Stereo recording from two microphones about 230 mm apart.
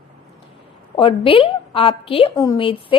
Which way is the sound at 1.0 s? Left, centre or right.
Left.